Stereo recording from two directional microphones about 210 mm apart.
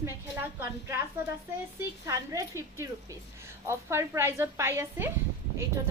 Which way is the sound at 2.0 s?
15° right (ahead or behind).